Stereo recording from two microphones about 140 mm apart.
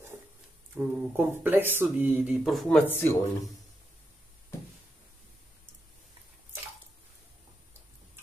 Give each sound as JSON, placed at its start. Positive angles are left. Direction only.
{"t": 0.7, "sound": "speech", "side_deg": -15}
{"t": 2.9, "sound": "speech", "side_deg": 15}